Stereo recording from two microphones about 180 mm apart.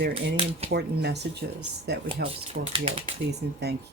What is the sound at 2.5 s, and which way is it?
Speech, 30° right (ahead or behind).